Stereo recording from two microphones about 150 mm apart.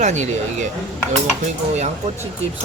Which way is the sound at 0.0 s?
50° right (ahead or behind).